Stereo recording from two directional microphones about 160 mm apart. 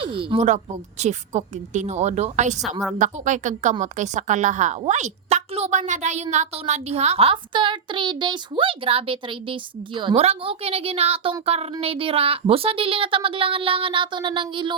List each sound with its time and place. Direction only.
0.0 s speech: 35° right (ahead or behind)
0.4 s a woman's voice: 45° right (ahead or behind); by 14.8 s 30° right (ahead or behind)